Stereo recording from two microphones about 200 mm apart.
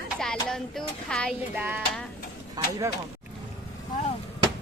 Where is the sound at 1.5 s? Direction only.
10° right (ahead or behind).